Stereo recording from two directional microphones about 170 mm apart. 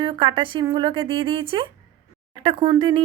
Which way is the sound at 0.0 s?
30° right (ahead or behind).